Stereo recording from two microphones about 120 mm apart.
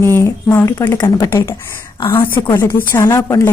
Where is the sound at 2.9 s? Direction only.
30° left (ahead or behind).